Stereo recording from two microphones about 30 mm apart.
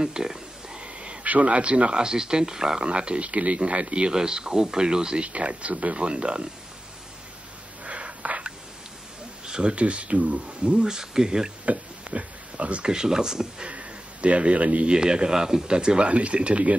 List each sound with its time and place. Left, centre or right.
0.0 s a sound: right
0.8 s a sound: right
1.2 s speech: right
2.0 s speech: right
2.8 s speech: right
4.1 s speech: right
5.2 s speech: right
7.8 s gasp: right
9.5 s speech: right
11.6 s a sound: right
12.8 s speech: right
13.7 s a sound: right
14.9 s speech: right
16.1 s speech: right